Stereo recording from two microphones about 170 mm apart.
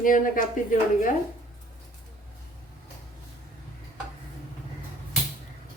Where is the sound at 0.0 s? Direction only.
50° left (ahead or behind).